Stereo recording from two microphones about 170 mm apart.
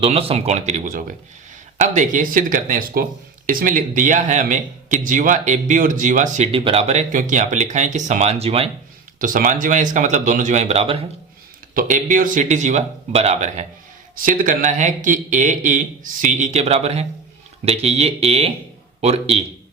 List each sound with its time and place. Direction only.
0.0 s speech: 35° right (ahead or behind)
9.1 s speech: 50° right (ahead or behind); by 11.0 s 35° right (ahead or behind)
11.7 s speech: 55° right (ahead or behind)
14.2 s speech: 55° right (ahead or behind); by 19.5 s 35° right (ahead or behind)